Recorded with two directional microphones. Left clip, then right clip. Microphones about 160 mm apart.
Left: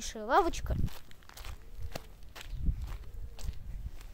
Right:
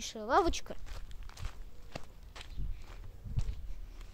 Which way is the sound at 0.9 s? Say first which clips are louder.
Left 2 dB; 65° left (ahead or behind).